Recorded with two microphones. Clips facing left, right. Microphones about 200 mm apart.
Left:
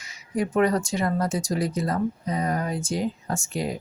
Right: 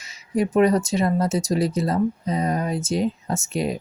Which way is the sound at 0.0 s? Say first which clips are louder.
Right 4 dB; 25° right (ahead or behind).